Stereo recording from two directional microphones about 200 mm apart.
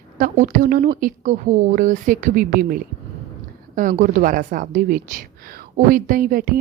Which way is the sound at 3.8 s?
40° right (ahead or behind).